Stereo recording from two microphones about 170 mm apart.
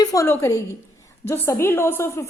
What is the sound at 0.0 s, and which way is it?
A woman's voice, 20° left (ahead or behind).